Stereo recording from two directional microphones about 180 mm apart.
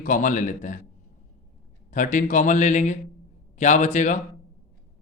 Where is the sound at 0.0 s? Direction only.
45° left (ahead or behind).